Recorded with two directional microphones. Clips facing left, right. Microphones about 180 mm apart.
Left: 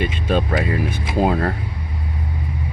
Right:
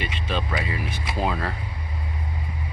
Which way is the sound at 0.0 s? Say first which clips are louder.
Left 8 dB; 45° left (ahead or behind).